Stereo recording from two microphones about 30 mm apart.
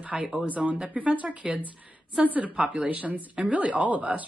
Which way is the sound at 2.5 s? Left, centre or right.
Right.